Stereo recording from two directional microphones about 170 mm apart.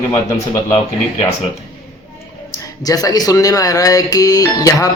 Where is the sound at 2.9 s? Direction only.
20° left (ahead or behind).